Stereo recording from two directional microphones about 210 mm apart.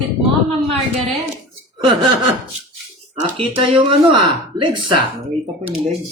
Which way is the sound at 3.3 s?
25° right (ahead or behind).